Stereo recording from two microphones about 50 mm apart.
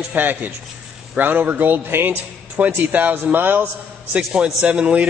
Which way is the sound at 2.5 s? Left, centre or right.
Right.